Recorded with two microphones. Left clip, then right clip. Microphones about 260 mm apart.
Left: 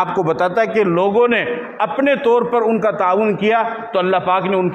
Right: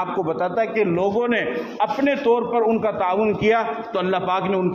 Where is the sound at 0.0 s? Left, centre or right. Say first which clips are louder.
Left 6 dB; left.